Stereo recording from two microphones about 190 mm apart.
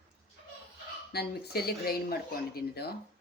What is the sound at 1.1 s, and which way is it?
Speech, 55° left (ahead or behind).